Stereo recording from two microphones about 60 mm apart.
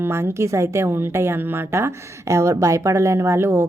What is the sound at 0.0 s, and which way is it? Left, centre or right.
A woman's voice, right.